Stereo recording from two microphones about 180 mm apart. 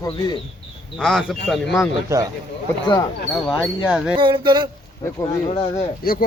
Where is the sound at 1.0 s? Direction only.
Centre (ahead or behind).